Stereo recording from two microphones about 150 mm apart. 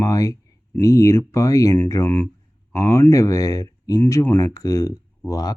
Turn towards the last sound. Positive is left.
turn(degrees=25)  # may be behind; listen again after turning